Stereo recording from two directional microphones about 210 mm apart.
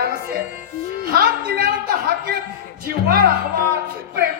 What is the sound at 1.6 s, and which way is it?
Speech, 45° right (ahead or behind).